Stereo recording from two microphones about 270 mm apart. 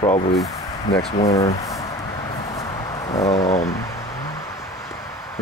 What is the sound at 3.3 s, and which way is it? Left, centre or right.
Speech, left.